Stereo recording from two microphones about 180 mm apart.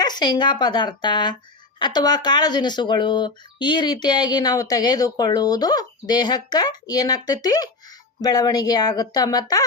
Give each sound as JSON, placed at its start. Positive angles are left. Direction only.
{"t": 0.0, "sound": "speech", "side_deg": 25}